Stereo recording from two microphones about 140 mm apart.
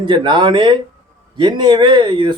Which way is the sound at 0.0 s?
35° right (ahead or behind).